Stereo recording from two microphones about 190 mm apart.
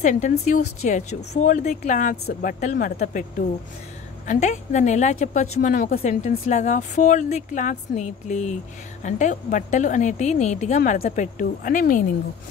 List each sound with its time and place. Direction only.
0.0 s a woman's voice: 40° left (ahead or behind)